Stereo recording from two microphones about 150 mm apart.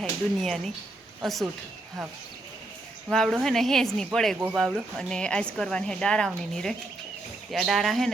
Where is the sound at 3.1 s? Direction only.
Centre (ahead or behind).